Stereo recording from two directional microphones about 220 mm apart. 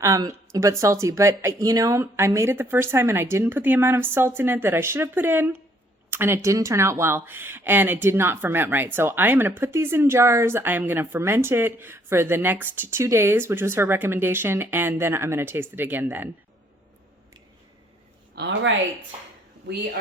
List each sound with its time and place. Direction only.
0.0 s speech: 15° right (ahead or behind)
18.3 s a woman's voice: 55° right (ahead or behind)